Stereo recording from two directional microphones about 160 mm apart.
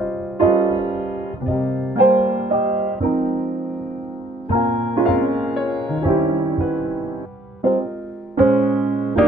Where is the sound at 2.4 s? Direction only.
45° right (ahead or behind).